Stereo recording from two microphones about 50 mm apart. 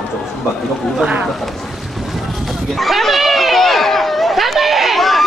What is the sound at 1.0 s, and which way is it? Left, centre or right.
Speech, right.